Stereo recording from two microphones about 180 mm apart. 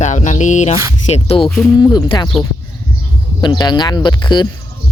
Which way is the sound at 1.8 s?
20° left (ahead or behind).